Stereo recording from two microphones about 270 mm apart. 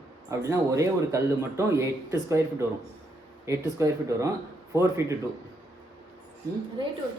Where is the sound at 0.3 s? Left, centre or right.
Centre.